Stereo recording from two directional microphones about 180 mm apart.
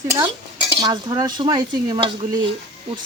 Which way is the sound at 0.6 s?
25° right (ahead or behind).